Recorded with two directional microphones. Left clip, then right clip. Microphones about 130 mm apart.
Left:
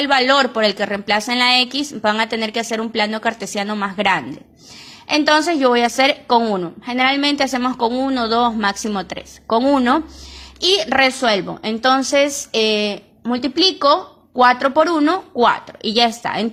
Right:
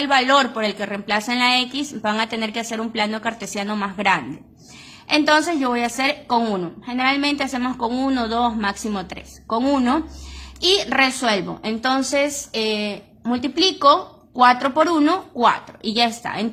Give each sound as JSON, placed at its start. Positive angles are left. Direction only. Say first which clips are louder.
{"t": 0.0, "sound": "a woman's voice", "louder": "left 2 dB", "side_deg": 30}
{"t": 7.9, "sound": "a man's voice", "louder": "left 2 dB", "side_deg": 15}
{"t": 8.2, "sound": "a woman's voice", "louder": "left 6 dB", "side_deg": 35}
{"t": 11.1, "sound": "a woman's voice", "louder": "left 3 dB", "side_deg": 25}
{"t": 13.2, "sound": "speech", "louder": "left 3 dB", "side_deg": 25}
{"t": 15.4, "sound": "a woman's voice", "louder": "right 1 dB", "side_deg": 35}